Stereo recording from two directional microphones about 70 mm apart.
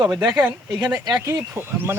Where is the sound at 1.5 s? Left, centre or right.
Right.